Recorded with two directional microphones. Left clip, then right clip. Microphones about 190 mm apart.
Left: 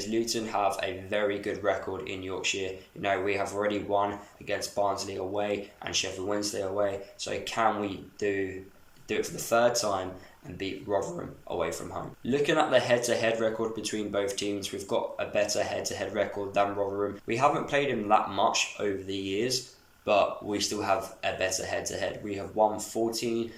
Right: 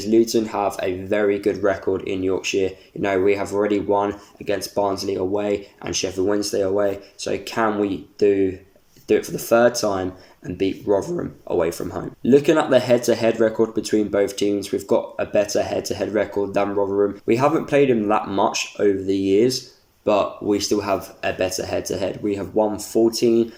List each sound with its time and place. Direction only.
0.0 s speech: 35° right (ahead or behind)